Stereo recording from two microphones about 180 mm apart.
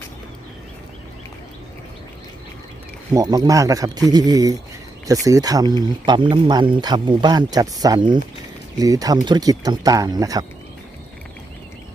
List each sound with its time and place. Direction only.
3.1 s speech: 20° right (ahead or behind)